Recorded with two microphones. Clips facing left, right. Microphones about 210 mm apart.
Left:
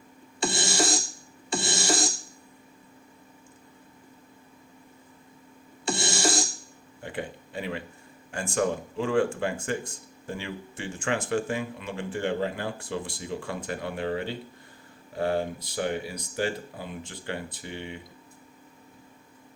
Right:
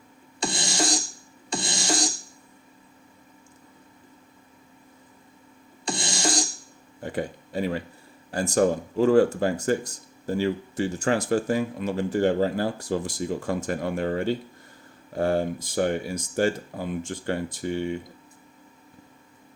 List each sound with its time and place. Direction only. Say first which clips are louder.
0.3 s music: left 1 dB; 5° left (ahead or behind)
5.8 s music: left 1 dB; 5° left (ahead or behind)
7.0 s speech: right 5 dB; 40° right (ahead or behind)